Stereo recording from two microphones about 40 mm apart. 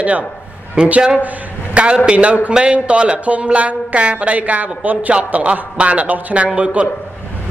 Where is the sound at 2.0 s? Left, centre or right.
Right.